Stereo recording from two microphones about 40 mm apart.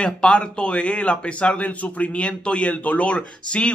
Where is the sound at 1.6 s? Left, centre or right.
Left.